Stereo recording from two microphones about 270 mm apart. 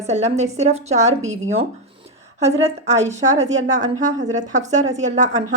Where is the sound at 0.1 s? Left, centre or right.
Right.